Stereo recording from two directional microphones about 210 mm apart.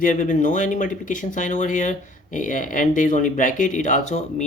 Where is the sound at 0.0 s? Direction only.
40° left (ahead or behind).